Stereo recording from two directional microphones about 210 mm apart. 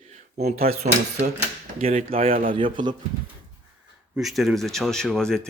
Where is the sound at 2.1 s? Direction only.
25° right (ahead or behind).